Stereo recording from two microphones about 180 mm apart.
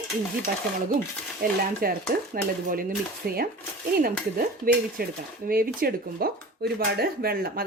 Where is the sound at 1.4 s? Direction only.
55° right (ahead or behind).